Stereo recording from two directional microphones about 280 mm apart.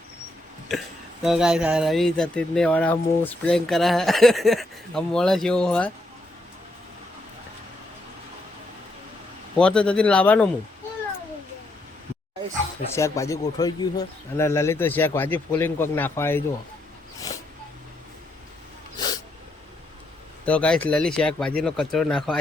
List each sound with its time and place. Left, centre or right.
1.2 s speech: centre
9.6 s speech: centre
12.9 s speech: centre
17.2 s a sound: centre
18.9 s a sound: centre
20.4 s speech: centre